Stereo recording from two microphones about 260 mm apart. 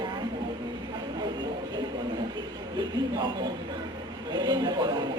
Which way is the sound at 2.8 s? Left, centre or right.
Centre.